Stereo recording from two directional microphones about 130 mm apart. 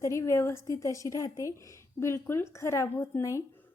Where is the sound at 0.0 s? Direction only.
20° left (ahead or behind).